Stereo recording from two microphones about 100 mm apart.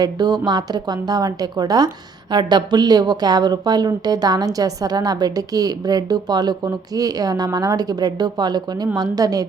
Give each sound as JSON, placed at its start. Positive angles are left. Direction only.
{"t": 0.0, "sound": "a woman's voice", "side_deg": -45}